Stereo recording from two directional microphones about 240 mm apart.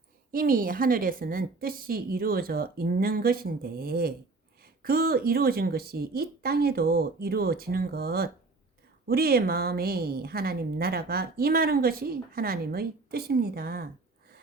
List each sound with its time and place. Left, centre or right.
0.3 s a woman's voice: right